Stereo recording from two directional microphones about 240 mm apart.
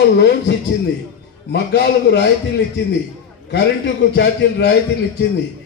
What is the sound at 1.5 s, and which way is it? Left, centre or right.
Speech, left.